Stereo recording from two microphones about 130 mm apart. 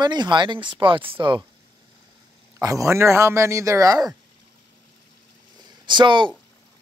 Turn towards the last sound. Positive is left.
turn(degrees=-40)  # may be behind; listen again after turning